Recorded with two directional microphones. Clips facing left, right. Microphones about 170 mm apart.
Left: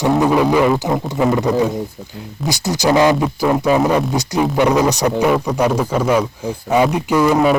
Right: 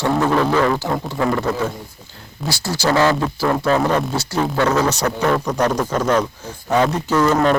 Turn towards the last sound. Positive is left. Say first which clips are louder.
# left 2 dB
turn(degrees=10)  # may be behind; listen again after turning